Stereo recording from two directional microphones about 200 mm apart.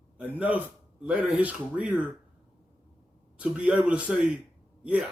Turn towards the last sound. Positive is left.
turn(degrees=-5)  # may be behind; listen again after turning